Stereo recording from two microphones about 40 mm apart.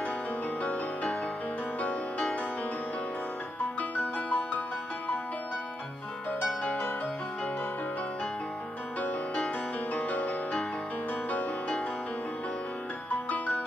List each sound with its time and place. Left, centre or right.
0.6 s music: left
3.9 s music: left
6.6 s music: left
9.9 s music: left
13.1 s music: left